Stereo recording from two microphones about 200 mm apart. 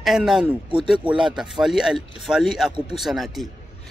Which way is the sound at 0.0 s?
Centre (ahead or behind).